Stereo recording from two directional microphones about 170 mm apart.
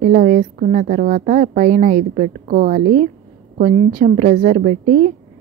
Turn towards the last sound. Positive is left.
turn(degrees=-45)  # may be behind; listen again after turning